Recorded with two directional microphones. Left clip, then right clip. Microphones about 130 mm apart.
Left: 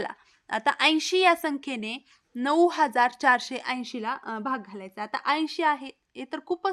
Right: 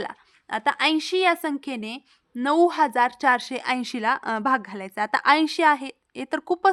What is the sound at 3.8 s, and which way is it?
A woman's voice, 45° right (ahead or behind).